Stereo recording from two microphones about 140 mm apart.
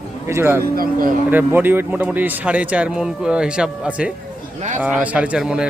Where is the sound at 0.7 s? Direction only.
90° right.